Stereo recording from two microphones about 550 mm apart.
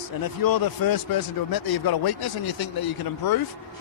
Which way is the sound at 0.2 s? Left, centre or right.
Left.